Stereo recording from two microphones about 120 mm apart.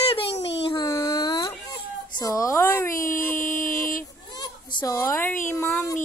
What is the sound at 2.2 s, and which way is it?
Speech, 25° left (ahead or behind).